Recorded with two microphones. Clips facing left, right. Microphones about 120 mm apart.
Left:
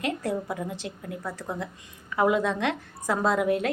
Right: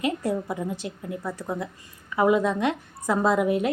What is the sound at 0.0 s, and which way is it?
A woman's voice, 10° right (ahead or behind).